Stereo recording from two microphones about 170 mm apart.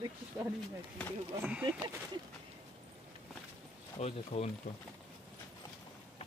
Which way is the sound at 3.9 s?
40° left (ahead or behind).